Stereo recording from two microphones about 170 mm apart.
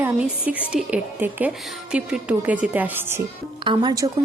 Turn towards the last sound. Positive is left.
turn(degrees=-20)  # may be behind; listen again after turning